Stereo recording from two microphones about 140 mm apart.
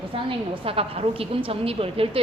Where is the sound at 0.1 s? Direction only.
40° right (ahead or behind).